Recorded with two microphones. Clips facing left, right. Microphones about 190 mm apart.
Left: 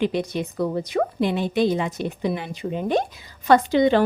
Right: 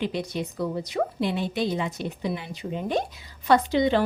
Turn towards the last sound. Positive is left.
turn(degrees=55)  # may be behind; listen again after turning